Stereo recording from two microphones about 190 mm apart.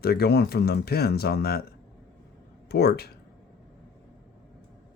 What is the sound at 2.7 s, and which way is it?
Speech, 55° left (ahead or behind).